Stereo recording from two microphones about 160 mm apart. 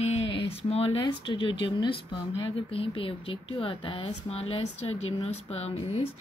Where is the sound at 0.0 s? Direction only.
40° left (ahead or behind).